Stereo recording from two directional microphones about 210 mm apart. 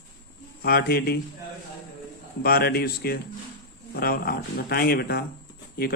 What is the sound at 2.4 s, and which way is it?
Speech, 45° left (ahead or behind).